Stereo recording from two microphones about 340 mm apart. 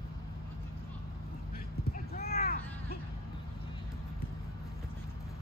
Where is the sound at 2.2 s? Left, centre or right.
Left.